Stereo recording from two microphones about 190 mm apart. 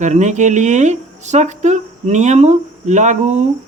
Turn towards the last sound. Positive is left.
turn(degrees=-40)  # may be behind; listen again after turning